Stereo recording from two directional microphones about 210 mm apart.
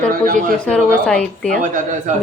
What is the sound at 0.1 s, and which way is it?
Speech, 40° right (ahead or behind).